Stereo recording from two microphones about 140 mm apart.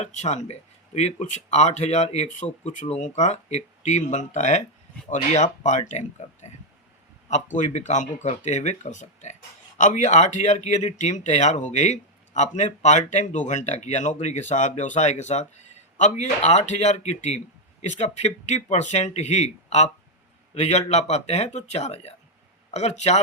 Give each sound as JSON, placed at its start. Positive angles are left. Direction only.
{"t": 0.0, "sound": "speech", "side_deg": 55}